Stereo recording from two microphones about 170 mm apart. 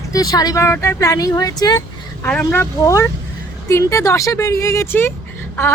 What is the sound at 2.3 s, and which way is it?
Speech, 10° left (ahead or behind).